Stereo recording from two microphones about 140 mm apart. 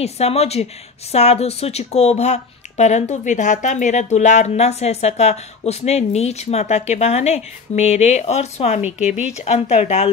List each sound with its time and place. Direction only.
0.0 s speech: 50° left (ahead or behind)